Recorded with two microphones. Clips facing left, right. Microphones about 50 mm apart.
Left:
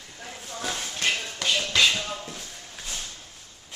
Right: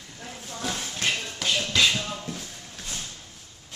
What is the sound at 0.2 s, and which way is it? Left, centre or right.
Shuffle, centre.